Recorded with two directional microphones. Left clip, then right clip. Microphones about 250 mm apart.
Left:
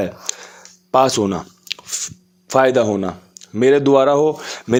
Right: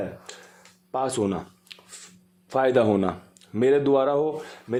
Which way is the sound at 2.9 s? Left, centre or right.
Centre.